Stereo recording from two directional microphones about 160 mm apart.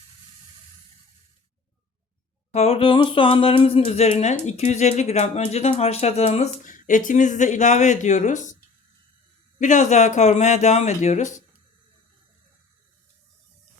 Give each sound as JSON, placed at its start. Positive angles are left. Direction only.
{"t": 2.5, "sound": "music", "side_deg": 40}
{"t": 9.6, "sound": "music", "side_deg": 50}